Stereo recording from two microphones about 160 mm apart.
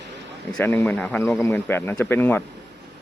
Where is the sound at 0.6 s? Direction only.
10° left (ahead or behind).